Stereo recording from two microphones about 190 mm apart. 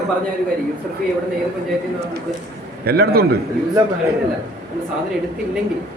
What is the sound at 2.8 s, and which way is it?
Speech, 55° right (ahead or behind).